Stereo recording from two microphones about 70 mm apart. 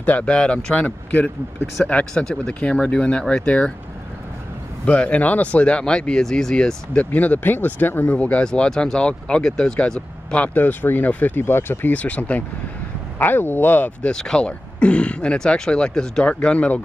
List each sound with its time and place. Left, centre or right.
0.0 s speech: centre
4.8 s speech: centre
7.1 s speech: left
11.9 s speech: left
14.1 s speech: centre